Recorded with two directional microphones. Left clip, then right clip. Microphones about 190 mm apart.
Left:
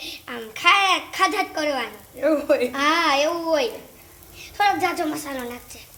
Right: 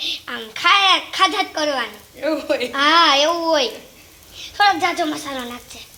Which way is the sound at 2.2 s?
45° left (ahead or behind).